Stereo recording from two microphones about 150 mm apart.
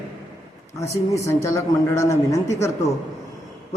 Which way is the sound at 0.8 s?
20° left (ahead or behind).